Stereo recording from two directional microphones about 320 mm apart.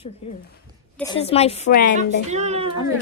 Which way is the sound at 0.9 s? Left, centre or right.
Centre.